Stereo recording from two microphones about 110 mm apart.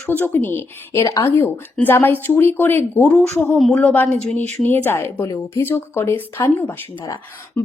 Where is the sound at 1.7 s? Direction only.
15° left (ahead or behind).